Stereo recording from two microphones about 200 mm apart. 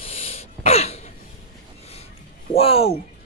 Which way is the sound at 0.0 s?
30° left (ahead or behind).